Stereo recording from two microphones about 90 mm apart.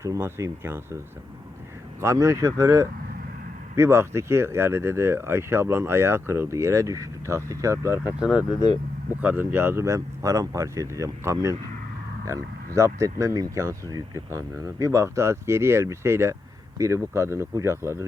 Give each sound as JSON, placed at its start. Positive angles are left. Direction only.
{"t": 0.0, "sound": "speech", "side_deg": -30}
{"t": 9.2, "sound": "speech", "side_deg": -20}